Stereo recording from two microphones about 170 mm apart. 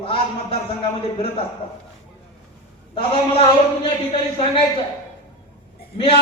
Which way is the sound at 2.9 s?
30° left (ahead or behind).